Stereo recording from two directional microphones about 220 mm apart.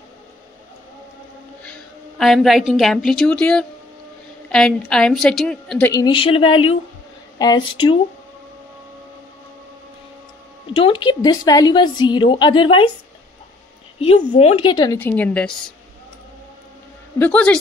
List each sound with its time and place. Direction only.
1.6 s a woman's voice: 5° left (ahead or behind); by 8.0 s 25° left (ahead or behind)
10.7 s a woman's voice: 25° left (ahead or behind)
14.3 s a woman's voice: 25° left (ahead or behind)
15.0 s a woman's voice: 10° left (ahead or behind)
17.2 s a woman's voice: 5° left (ahead or behind)